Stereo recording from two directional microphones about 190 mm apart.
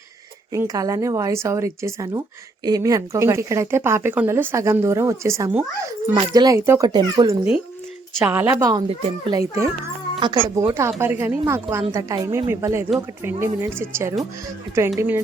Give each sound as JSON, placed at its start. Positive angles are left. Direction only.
{"t": 0.5, "sound": "speech", "side_deg": -15}
{"t": 8.2, "sound": "speech", "side_deg": -10}